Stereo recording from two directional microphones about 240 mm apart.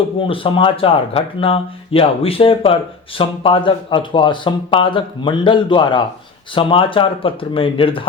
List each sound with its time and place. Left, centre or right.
0.2 s speech: left